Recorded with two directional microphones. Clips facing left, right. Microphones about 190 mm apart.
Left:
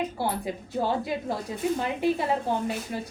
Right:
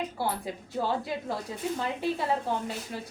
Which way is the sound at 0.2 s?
15° left (ahead or behind).